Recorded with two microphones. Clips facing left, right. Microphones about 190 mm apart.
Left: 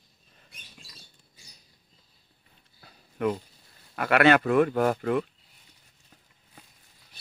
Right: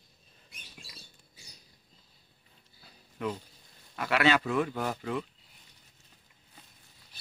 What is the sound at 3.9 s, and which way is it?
Speech, 60° left (ahead or behind).